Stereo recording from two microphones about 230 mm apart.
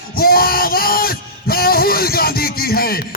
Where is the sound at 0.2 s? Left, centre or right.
Left.